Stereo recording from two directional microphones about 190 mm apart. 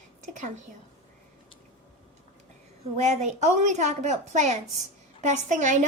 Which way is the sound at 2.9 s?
35° right (ahead or behind).